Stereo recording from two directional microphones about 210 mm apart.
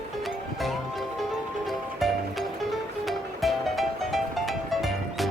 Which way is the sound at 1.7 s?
Centre (ahead or behind).